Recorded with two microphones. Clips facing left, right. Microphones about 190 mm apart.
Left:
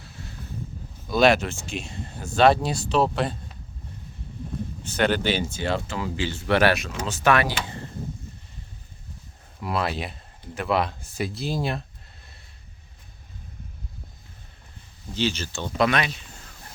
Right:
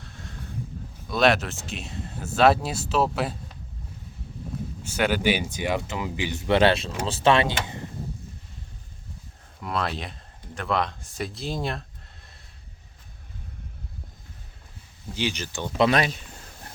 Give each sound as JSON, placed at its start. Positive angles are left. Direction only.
{"t": 0.0, "sound": "a sound", "side_deg": 5}
{"t": 1.0, "sound": "speech", "side_deg": 0}
{"t": 4.8, "sound": "speech", "side_deg": -10}
{"t": 9.6, "sound": "speech", "side_deg": 5}
{"t": 15.1, "sound": "speech", "side_deg": -15}
{"t": 15.9, "sound": "speech", "side_deg": -40}